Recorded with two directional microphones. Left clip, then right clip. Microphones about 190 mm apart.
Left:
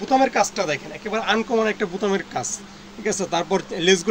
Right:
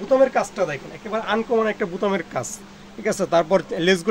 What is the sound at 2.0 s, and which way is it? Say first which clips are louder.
Speech: even; 45° right (ahead or behind).